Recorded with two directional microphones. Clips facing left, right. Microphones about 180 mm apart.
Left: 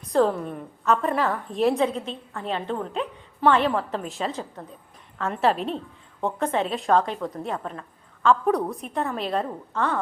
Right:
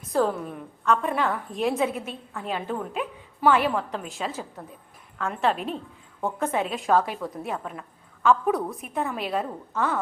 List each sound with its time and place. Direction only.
0.1 s a woman's voice: centre (ahead or behind)